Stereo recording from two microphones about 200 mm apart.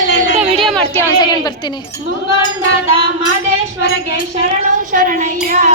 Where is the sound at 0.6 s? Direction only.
Centre (ahead or behind).